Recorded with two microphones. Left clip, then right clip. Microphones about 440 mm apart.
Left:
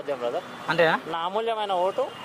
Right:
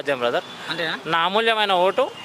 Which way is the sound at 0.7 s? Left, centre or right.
Left.